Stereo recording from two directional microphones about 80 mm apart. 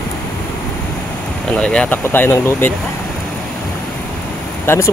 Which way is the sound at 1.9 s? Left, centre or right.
Left.